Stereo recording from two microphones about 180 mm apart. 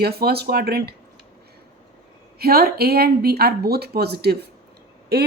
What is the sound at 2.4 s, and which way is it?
A woman's voice, 60° right (ahead or behind).